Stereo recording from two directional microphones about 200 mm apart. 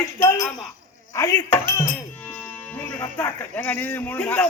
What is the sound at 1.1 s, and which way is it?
Livestock, 15° left (ahead or behind).